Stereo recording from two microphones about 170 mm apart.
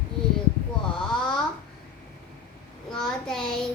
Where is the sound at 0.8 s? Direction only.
5° left (ahead or behind).